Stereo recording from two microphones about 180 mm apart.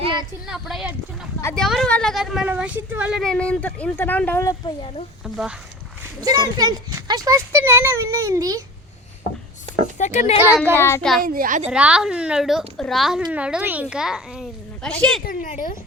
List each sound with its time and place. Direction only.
0.0 s a sound: 25° right (ahead or behind)
0.4 s speech: centre (ahead or behind)
4.6 s speech: 25° left (ahead or behind)
5.2 s speech: 5° right (ahead or behind)
6.6 s a child's voice: 20° right (ahead or behind)
9.7 s a sound: 40° right (ahead or behind)
10.0 s a woman's voice: 45° left (ahead or behind)
10.3 s a child's voice: 10° right (ahead or behind)
10.8 s a child's voice: 15° left (ahead or behind)
11.2 s a woman's voice: 50° right (ahead or behind)
11.7 s speech: 5° right (ahead or behind)
15.2 s a woman's voice: 50° left (ahead or behind)